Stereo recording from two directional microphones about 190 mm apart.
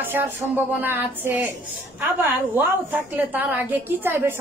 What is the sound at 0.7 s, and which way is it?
A woman's voice, 10° right (ahead or behind).